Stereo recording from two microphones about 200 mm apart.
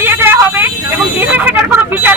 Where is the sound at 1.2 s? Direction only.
10° right (ahead or behind).